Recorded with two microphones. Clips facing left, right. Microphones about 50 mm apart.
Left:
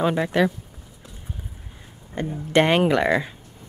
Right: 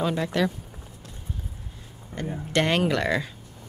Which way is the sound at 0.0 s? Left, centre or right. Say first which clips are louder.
Left 4 dB; left.